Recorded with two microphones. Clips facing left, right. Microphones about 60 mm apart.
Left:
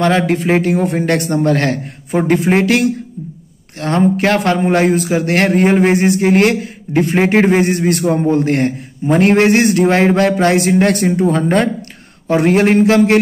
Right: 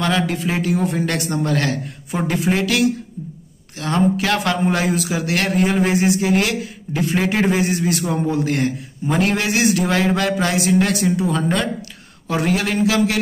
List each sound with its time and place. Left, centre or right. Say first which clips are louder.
0.0 s speech: left 6 dB; left